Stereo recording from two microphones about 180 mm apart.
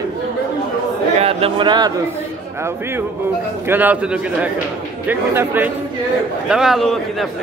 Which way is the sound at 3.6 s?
10° right (ahead or behind).